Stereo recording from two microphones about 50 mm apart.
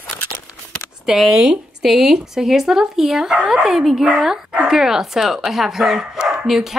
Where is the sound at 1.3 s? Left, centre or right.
Centre.